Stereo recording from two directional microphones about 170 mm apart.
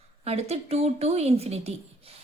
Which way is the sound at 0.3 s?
40° right (ahead or behind).